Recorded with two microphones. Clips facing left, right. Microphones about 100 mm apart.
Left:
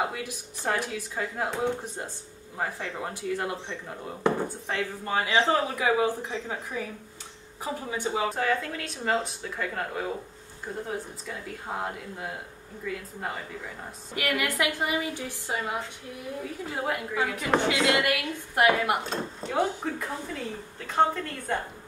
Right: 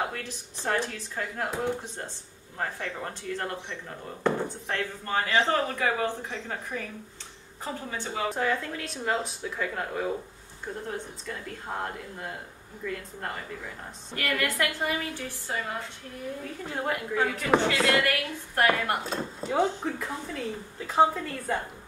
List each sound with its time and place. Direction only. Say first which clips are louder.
0.0 s speech: left 2 dB; 10° left (ahead or behind)
2.5 s speech: left 1 dB; 10° left (ahead or behind)
8.3 s speech: left 1 dB; centre (ahead or behind); by 15.8 s 15° left (ahead or behind)
16.6 s speech: right 1 dB; 5° left (ahead or behind)
18.0 s speech: left 1 dB; 15° left (ahead or behind)
19.0 s speech: right 1 dB; centre (ahead or behind)